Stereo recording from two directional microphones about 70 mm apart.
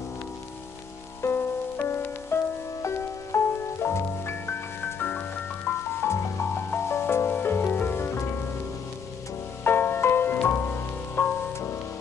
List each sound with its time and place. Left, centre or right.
1.2 s music: left
9.7 s music: left